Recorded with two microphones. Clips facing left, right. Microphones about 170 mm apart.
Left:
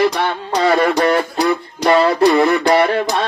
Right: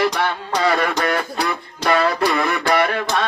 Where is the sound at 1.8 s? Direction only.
25° left (ahead or behind).